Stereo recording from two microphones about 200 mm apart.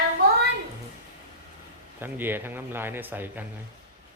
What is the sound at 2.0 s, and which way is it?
A man's voice, 10° right (ahead or behind).